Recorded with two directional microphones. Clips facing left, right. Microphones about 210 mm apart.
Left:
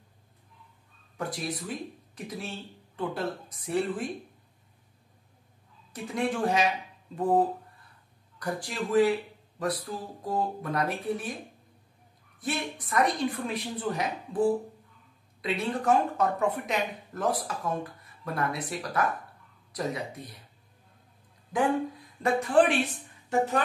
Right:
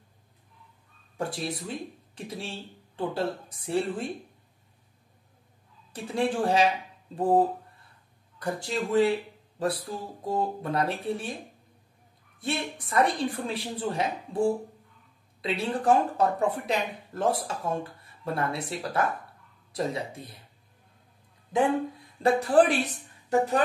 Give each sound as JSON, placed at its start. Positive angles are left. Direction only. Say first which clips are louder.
{"t": 1.1, "sound": "speech", "louder": "right 2 dB", "side_deg": -30}
{"t": 5.9, "sound": "speech", "louder": "right 2 dB", "side_deg": -30}
{"t": 12.4, "sound": "speech", "louder": "right 1 dB", "side_deg": -30}
{"t": 21.5, "sound": "speech", "louder": "right 2 dB", "side_deg": -25}